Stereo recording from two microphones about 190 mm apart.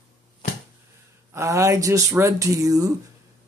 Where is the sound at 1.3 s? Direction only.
15° right (ahead or behind).